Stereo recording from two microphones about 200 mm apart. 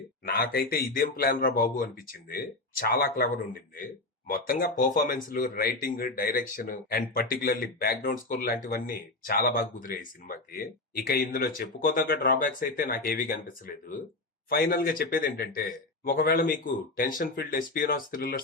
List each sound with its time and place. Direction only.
0.3 s speech: 50° left (ahead or behind)
4.3 s speech: 45° left (ahead or behind)